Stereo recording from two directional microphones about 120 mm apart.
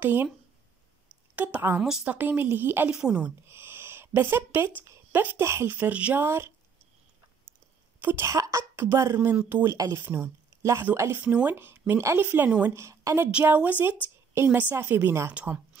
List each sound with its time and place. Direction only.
0.0 s a woman's voice: 15° right (ahead or behind)
1.3 s a woman's voice: 15° right (ahead or behind)
3.4 s speech: 20° right (ahead or behind)
8.0 s a woman's voice: 20° right (ahead or behind)
9.8 s a woman's voice: 25° right (ahead or behind); by 12.7 s 10° right (ahead or behind)
12.7 s a woman's voice: 25° right (ahead or behind)
13.3 s a woman's voice: 10° right (ahead or behind)
15.3 s speech: 10° right (ahead or behind)